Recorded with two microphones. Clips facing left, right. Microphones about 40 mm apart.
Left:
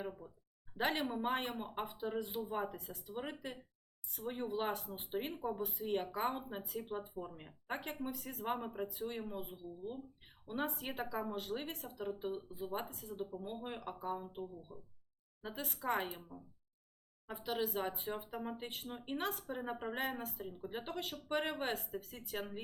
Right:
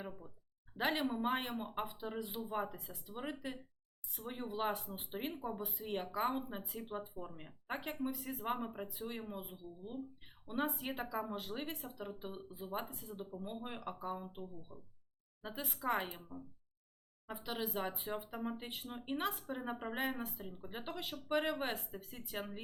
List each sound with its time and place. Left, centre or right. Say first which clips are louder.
0.0 s speech: left 3 dB; centre